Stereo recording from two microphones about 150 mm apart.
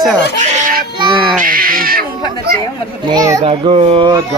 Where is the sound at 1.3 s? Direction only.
70° right (ahead or behind).